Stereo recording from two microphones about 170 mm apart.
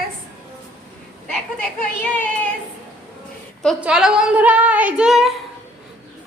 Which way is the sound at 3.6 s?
5° right (ahead or behind).